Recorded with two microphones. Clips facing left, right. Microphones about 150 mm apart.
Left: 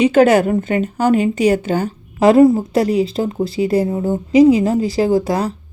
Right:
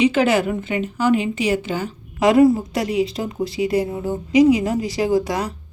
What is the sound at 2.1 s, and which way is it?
A woman's voice, 30° left (ahead or behind).